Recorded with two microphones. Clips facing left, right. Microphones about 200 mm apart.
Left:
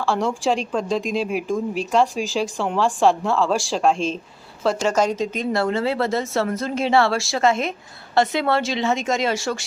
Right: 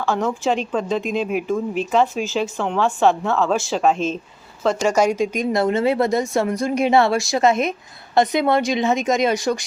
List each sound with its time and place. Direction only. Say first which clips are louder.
0.1 s speech: right 1 dB; 5° left (ahead or behind)
4.9 s a woman's voice: right 4 dB; 10° right (ahead or behind)